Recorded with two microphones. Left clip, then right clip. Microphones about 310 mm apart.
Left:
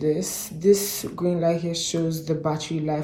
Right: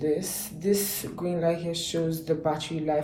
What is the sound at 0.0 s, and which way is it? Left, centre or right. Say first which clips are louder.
Speech: left 3 dB; left.